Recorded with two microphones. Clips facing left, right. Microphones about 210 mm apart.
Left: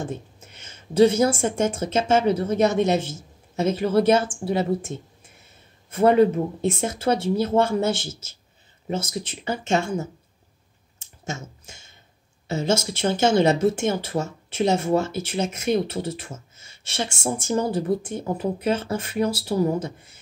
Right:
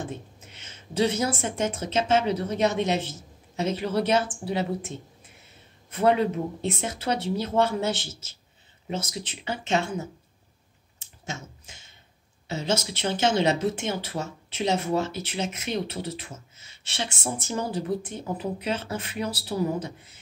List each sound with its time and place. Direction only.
0.9 s speech: 45° left (ahead or behind)
12.4 s speech: 45° left (ahead or behind)